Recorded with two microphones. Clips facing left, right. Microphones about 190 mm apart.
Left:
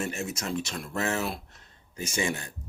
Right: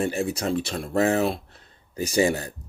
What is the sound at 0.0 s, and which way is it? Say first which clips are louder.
Speech: right 7 dB; 35° right (ahead or behind).